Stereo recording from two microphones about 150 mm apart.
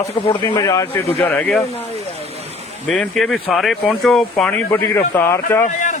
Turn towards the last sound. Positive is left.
turn(degrees=55)  # may be behind; listen again after turning